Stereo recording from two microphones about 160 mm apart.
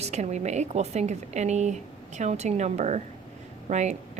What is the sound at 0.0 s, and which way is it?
Speech, 45° right (ahead or behind).